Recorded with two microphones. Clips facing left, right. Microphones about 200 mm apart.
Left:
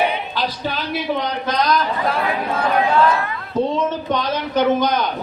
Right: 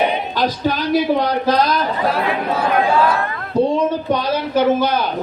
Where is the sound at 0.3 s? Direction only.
45° right (ahead or behind).